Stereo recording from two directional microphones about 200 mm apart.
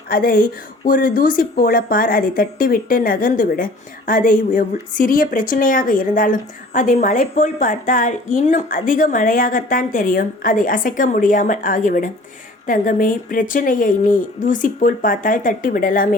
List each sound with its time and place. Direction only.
0.1 s speech: 45° left (ahead or behind)